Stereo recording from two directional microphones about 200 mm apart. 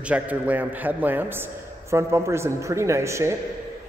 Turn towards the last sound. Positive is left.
turn(degrees=-15)  # may be behind; listen again after turning